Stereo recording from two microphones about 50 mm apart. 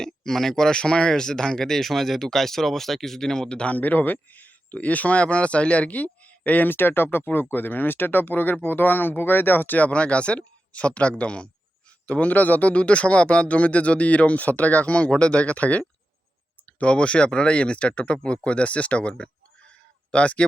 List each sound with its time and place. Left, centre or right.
0.0 s speech: centre
3.8 s speech: left
9.9 s speech: left